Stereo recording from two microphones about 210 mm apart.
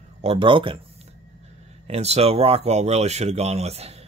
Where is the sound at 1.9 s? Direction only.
30° right (ahead or behind).